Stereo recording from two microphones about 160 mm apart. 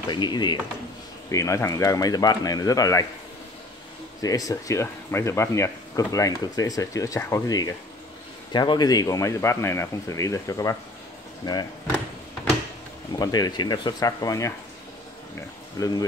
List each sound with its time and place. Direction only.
0.1 s speech: 25° left (ahead or behind)
4.2 s speech: 20° left (ahead or behind)
13.2 s speech: 25° left (ahead or behind)
15.8 s speech: 20° left (ahead or behind)